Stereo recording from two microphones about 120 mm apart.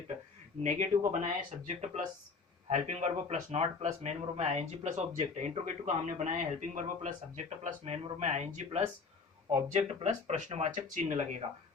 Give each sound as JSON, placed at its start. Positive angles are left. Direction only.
{"t": 0.6, "sound": "speech", "side_deg": -90}
{"t": 2.6, "sound": "speech", "side_deg": -70}